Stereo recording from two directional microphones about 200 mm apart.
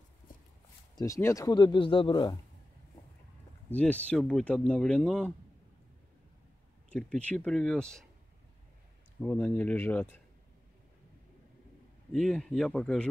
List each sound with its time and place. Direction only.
0.9 s speech: 15° left (ahead or behind)
3.7 s speech: 5° left (ahead or behind)
6.9 s speech: 5° left (ahead or behind)
9.2 s speech: 5° left (ahead or behind)
12.1 s speech: centre (ahead or behind)